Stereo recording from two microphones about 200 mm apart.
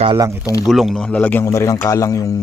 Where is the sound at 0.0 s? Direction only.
25° right (ahead or behind).